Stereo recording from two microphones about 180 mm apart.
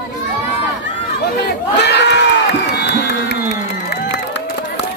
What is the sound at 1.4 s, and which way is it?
Crowd, 65° left (ahead or behind).